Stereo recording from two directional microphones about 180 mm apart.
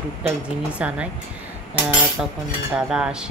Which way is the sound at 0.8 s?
5° right (ahead or behind).